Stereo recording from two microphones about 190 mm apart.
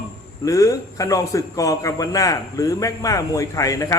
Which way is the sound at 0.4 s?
15° left (ahead or behind).